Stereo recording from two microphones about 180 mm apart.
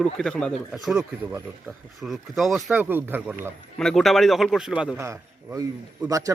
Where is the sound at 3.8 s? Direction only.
Centre (ahead or behind).